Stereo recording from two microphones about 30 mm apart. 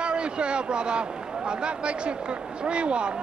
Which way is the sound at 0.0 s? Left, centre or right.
Right.